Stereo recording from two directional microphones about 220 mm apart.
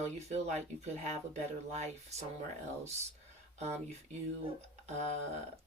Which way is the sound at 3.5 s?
30° right (ahead or behind).